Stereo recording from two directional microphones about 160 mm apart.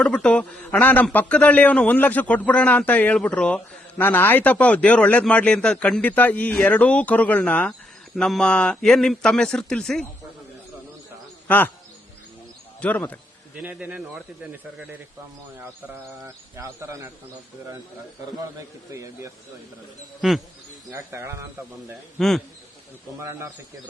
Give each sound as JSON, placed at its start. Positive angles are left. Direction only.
{"t": 0.0, "sound": "a man's voice", "side_deg": 5}
{"t": 11.4, "sound": "a man's voice", "side_deg": 10}
{"t": 12.8, "sound": "a man's voice", "side_deg": 10}
{"t": 13.6, "sound": "speech", "side_deg": -10}
{"t": 16.2, "sound": "speech", "side_deg": -15}
{"t": 18.9, "sound": "speech", "side_deg": -20}
{"t": 20.2, "sound": "speech", "side_deg": -5}
{"t": 20.9, "sound": "speech", "side_deg": -15}
{"t": 22.2, "sound": "speech", "side_deg": 5}